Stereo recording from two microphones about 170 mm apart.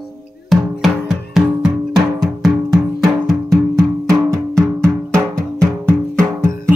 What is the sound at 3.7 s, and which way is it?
Music, 20° right (ahead or behind).